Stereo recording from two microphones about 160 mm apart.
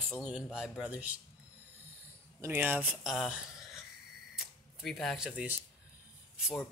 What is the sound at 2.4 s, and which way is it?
Speech, 10° right (ahead or behind).